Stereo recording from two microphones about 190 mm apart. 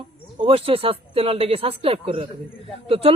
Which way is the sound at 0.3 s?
30° right (ahead or behind).